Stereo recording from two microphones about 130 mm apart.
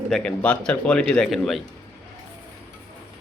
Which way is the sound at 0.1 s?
10° left (ahead or behind).